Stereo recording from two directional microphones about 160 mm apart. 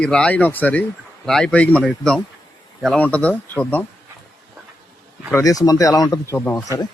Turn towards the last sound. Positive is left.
turn(degrees=20)  # may be behind; listen again after turning